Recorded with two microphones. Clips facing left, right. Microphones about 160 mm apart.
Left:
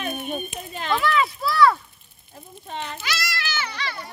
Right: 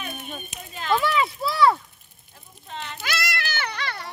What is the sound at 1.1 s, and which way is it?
Speech, 20° right (ahead or behind).